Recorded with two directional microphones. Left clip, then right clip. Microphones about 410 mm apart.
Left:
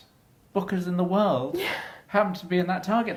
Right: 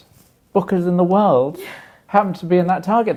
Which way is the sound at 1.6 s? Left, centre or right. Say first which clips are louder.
Left 4 dB; left.